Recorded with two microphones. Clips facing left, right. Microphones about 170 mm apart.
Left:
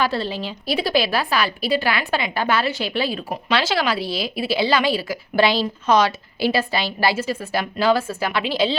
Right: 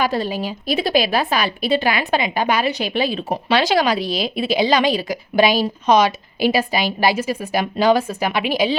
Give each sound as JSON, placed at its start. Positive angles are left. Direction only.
{"t": 0.0, "sound": "a woman's voice", "side_deg": -15}